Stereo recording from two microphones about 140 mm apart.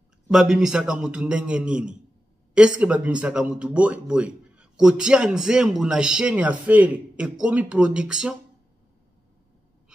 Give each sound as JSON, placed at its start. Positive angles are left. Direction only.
{"t": 0.3, "sound": "a man's voice", "side_deg": -5}